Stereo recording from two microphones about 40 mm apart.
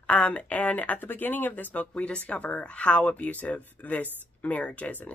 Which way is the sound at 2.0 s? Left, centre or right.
Left.